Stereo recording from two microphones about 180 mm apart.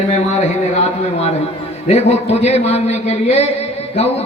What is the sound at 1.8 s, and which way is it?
A man's voice, 35° left (ahead or behind).